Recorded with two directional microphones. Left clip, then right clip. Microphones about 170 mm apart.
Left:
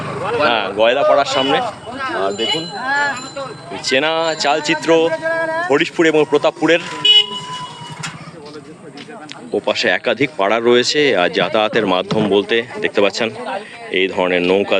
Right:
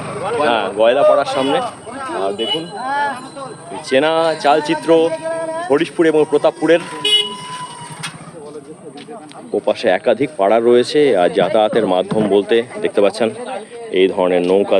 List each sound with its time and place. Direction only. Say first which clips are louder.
0.4 s speech: right 1 dB; 5° left (ahead or behind)
2.7 s speech: left 1 dB; 10° right (ahead or behind)
3.8 s speech: right 2 dB; 15° left (ahead or behind)
5.5 s speech: left 3 dB; centre (ahead or behind)
5.7 s speech: right 1 dB; 10° left (ahead or behind)
7.0 s vehicle: left 5 dB; 40° left (ahead or behind)
9.5 s speech: right 1 dB; 10° right (ahead or behind)